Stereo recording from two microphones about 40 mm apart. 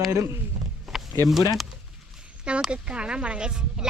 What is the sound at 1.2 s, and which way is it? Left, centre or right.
Speech, centre.